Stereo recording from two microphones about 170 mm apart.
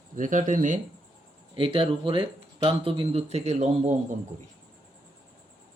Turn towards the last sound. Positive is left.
turn(degrees=-45)  # may be behind; listen again after turning